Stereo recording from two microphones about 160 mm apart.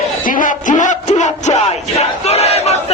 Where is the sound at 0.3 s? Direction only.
55° left (ahead or behind).